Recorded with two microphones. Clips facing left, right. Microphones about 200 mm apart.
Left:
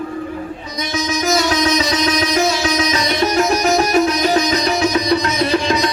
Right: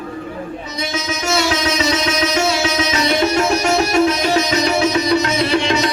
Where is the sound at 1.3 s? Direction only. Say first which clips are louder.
Left 2 dB; 30° right (ahead or behind).